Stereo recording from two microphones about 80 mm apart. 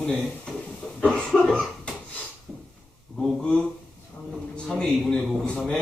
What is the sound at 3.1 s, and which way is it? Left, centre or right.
Speech, centre.